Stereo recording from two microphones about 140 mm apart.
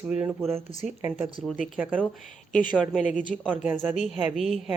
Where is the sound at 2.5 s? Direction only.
70° left (ahead or behind).